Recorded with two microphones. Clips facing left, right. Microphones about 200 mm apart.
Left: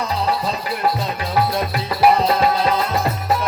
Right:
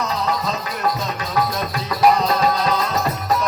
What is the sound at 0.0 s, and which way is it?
Music, 30° left (ahead or behind).